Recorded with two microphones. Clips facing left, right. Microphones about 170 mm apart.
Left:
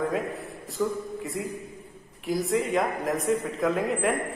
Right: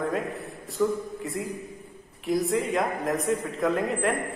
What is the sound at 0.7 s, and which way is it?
Speech, centre (ahead or behind).